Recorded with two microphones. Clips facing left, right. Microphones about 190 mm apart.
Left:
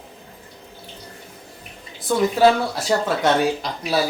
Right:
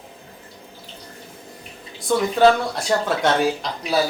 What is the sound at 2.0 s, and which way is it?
Speech, 5° left (ahead or behind).